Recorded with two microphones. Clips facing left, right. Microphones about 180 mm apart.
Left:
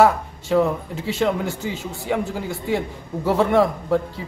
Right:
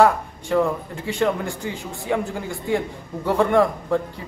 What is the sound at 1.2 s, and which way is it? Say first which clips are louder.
A man's voice: even; 5° left (ahead or behind).